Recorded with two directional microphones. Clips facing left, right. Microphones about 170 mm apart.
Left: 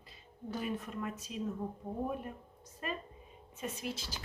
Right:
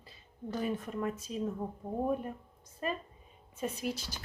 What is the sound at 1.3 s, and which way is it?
Speech, 35° right (ahead or behind).